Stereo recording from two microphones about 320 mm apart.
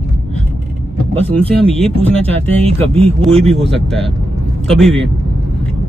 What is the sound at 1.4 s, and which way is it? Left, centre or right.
Speech, centre.